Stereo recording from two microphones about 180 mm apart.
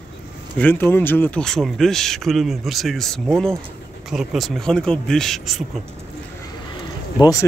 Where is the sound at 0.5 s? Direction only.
10° left (ahead or behind).